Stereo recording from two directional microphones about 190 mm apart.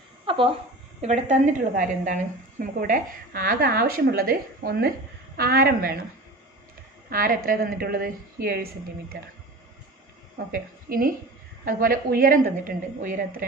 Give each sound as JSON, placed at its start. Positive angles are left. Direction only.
{"t": 0.3, "sound": "a woman's voice", "side_deg": -25}
{"t": 7.1, "sound": "speech", "side_deg": -50}
{"t": 10.5, "sound": "speech", "side_deg": -50}